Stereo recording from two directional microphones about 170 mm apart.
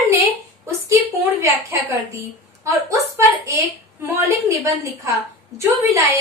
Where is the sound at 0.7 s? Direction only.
15° right (ahead or behind).